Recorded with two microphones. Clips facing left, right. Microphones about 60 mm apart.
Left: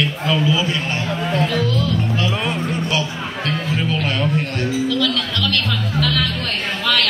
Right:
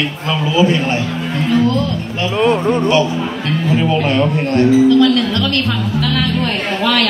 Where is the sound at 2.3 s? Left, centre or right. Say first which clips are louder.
Right 9 dB; centre.